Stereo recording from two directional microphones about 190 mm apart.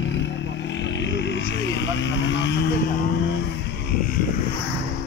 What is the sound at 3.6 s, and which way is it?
Vehicle, 55° left (ahead or behind).